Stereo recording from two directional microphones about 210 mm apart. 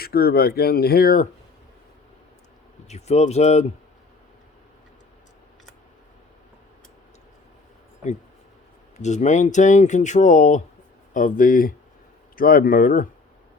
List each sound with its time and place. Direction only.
0.0 s speech: 45° left (ahead or behind)
2.9 s speech: 30° left (ahead or behind)
9.0 s speech: 35° left (ahead or behind)